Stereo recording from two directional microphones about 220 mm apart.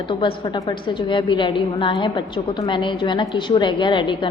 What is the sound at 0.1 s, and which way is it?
A woman's voice, 20° left (ahead or behind).